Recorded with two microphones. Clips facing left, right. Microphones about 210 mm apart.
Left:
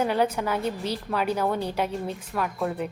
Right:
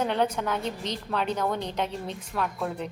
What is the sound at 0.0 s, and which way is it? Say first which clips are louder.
A woman's voice: left 2 dB; 10° left (ahead or behind).